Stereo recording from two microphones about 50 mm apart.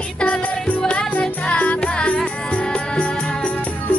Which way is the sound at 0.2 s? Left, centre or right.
Left.